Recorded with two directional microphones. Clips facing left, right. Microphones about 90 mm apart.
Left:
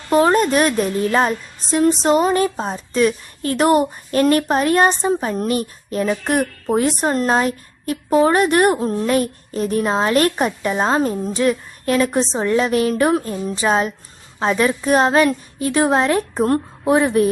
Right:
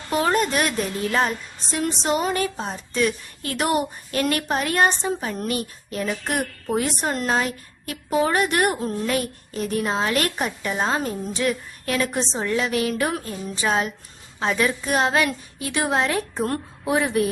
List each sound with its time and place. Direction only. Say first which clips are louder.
0.1 s a woman's voice: left 7 dB; 40° left (ahead or behind)